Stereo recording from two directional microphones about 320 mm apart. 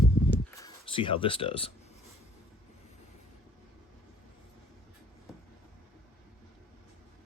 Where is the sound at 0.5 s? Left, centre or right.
Centre.